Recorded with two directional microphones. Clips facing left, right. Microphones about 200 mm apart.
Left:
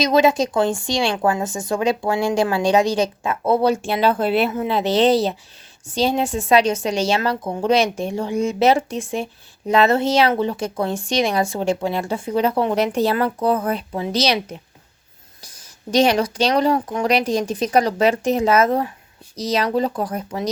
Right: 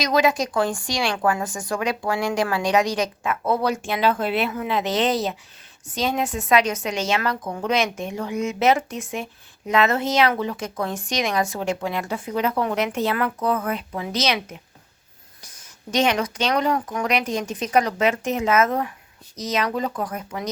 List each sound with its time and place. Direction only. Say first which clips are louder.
0.0 s a woman's voice: left 4 dB; 25° left (ahead or behind)